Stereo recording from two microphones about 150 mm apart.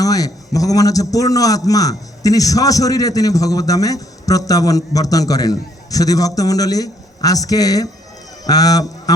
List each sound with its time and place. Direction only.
0.0 s a man's voice: 25° left (ahead or behind)